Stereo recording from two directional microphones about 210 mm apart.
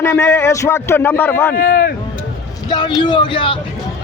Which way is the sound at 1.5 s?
45° left (ahead or behind).